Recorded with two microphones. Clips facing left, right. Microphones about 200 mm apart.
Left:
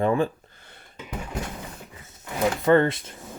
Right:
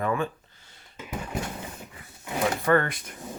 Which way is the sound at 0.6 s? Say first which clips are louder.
Left 7 dB; 60° left (ahead or behind).